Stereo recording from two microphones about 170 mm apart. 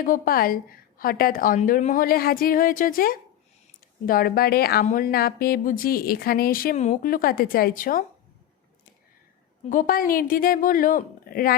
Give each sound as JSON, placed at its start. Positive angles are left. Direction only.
{"t": 0.0, "sound": "a woman's voice", "side_deg": 55}
{"t": 6.7, "sound": "speech", "side_deg": 40}
{"t": 7.1, "sound": "a woman's voice", "side_deg": 60}
{"t": 9.6, "sound": "a woman's voice", "side_deg": 55}